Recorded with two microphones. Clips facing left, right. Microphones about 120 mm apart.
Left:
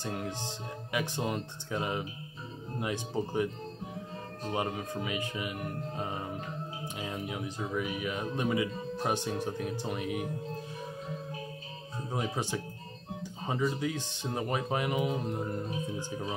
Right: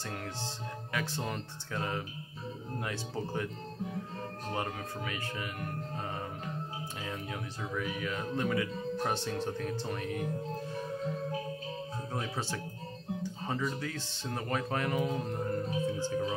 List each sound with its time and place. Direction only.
0.0 s speech: 15° left (ahead or behind)
4.5 s speech: 15° left (ahead or behind)
7.0 s speech: 15° left (ahead or behind)
12.1 s speech: 15° left (ahead or behind)